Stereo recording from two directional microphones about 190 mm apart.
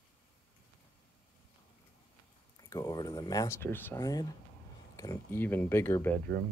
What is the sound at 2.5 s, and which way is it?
Speech, 20° left (ahead or behind).